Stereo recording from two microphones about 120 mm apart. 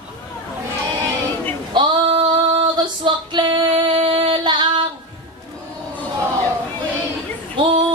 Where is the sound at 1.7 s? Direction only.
45° right (ahead or behind).